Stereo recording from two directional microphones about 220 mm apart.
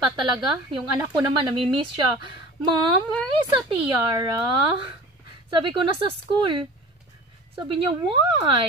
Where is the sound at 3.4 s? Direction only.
20° right (ahead or behind).